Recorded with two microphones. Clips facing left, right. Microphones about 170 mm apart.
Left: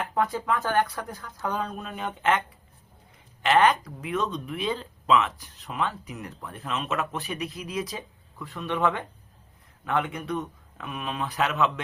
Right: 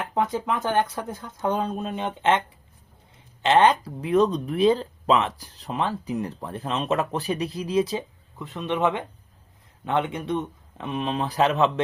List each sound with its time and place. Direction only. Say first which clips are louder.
0.1 s speech: right 2 dB; 20° right (ahead or behind)
3.4 s speech: right 3 dB; 25° right (ahead or behind)